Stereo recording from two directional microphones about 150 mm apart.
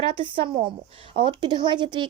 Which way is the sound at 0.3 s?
35° right (ahead or behind).